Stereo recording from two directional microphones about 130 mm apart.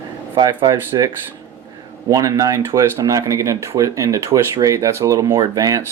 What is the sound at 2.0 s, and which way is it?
Speech, 25° right (ahead or behind).